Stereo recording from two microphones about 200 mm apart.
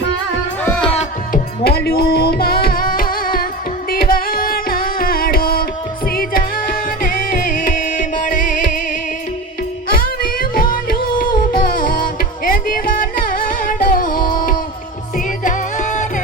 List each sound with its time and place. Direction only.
0.9 s music: 45° left (ahead or behind)
10.5 s music: 45° left (ahead or behind)
15.4 s music: 40° left (ahead or behind)